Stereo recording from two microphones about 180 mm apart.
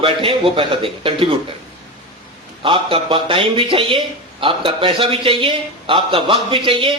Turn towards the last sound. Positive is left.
turn(degrees=-30)  # may be behind; listen again after turning